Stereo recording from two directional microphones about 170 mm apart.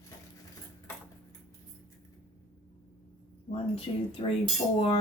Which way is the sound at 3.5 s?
35° left (ahead or behind).